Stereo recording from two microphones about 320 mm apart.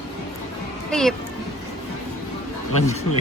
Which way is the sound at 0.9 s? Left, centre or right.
Centre.